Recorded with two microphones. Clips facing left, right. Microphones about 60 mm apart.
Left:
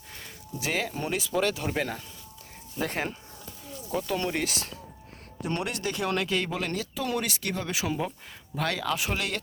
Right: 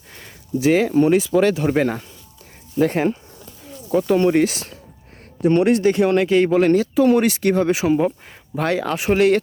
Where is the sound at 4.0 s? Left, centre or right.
Right.